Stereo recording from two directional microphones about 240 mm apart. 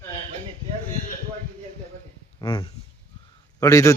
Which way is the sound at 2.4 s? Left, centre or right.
Centre.